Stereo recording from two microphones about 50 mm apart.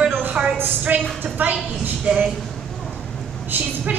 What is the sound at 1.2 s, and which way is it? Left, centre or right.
Speech, right.